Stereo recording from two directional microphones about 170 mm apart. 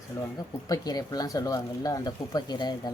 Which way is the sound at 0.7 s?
20° left (ahead or behind).